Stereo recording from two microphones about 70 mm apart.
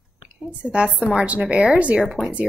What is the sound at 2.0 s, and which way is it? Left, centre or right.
Speech, centre.